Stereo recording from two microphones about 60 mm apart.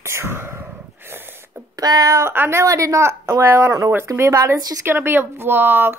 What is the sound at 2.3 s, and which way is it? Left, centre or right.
Speech, right.